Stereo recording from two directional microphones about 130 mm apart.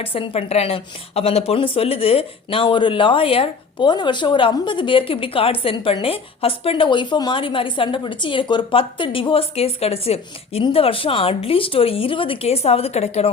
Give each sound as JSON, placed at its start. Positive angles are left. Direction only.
{"t": 0.0, "sound": "a woman's voice", "side_deg": 45}